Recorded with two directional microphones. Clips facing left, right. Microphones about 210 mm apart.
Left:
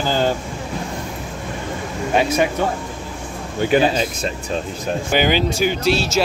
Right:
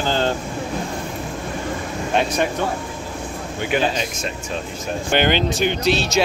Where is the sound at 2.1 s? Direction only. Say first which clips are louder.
Left 3 dB; 5° left (ahead or behind).